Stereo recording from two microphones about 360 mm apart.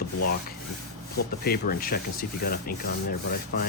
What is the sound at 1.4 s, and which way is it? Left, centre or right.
Speech, left.